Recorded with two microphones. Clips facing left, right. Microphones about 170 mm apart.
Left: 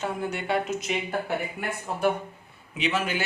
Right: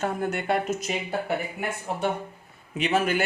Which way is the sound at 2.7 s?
50° right (ahead or behind).